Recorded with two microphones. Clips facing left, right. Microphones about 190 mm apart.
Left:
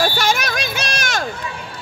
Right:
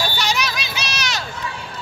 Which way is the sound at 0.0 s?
50° left (ahead or behind).